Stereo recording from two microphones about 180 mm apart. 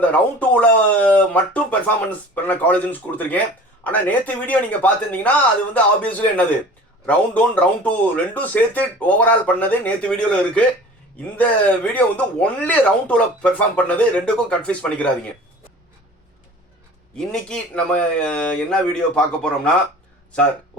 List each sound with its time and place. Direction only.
0.1 s speech: 10° left (ahead or behind)
17.2 s speech: 5° left (ahead or behind)